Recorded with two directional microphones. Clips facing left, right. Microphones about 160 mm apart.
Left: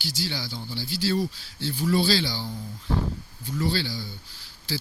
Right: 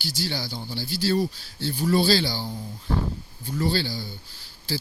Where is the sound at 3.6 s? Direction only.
40° right (ahead or behind).